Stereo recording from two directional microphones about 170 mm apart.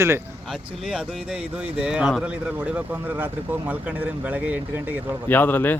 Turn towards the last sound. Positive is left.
turn(degrees=10)  # may be behind; listen again after turning